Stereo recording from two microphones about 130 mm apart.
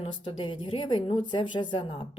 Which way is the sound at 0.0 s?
40° left (ahead or behind).